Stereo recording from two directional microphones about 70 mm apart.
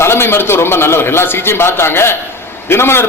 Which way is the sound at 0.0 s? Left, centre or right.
Left.